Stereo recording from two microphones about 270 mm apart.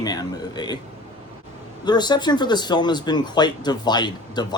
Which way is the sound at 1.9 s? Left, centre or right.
Centre.